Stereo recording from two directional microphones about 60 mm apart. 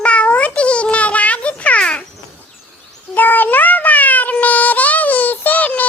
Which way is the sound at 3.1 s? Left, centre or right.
Left.